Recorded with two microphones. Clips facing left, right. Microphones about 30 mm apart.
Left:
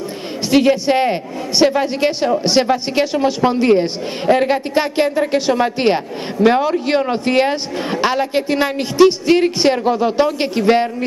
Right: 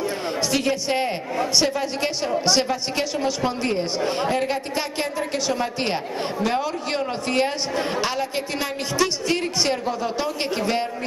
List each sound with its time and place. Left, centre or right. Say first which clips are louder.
0.5 s speech: left 12 dB; left